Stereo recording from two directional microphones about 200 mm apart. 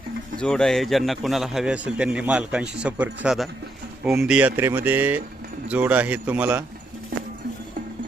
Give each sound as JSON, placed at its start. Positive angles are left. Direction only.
{"t": 0.3, "sound": "a man's voice", "side_deg": 5}